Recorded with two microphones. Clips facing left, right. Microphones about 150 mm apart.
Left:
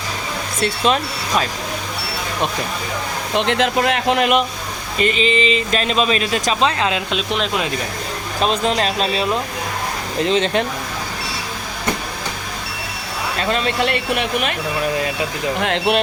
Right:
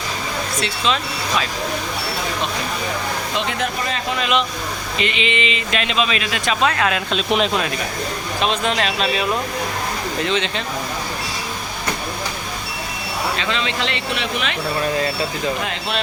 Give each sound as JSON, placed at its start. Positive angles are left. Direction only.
{"t": 3.3, "sound": "speech", "side_deg": 70}
{"t": 4.9, "sound": "speech", "side_deg": 40}
{"t": 7.1, "sound": "speech", "side_deg": 0}
{"t": 8.4, "sound": "speech", "side_deg": 35}
{"t": 10.2, "sound": "speech", "side_deg": 40}
{"t": 13.4, "sound": "speech", "side_deg": 45}
{"t": 14.9, "sound": "speech", "side_deg": 15}
{"t": 15.6, "sound": "speech", "side_deg": 65}